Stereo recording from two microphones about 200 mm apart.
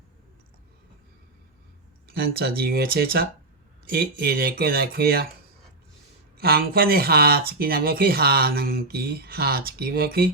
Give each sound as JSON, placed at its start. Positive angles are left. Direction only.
{"t": 2.0, "sound": "speech", "side_deg": -50}
{"t": 6.3, "sound": "speech", "side_deg": -50}